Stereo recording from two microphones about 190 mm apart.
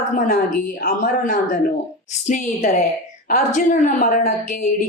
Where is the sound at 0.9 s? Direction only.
50° left (ahead or behind).